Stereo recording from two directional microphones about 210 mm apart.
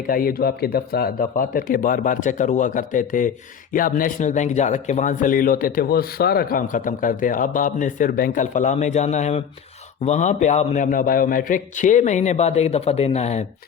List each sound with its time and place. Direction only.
0.1 s speech: 45° left (ahead or behind)